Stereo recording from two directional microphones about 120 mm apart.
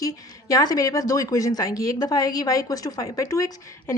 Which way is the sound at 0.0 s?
30° left (ahead or behind).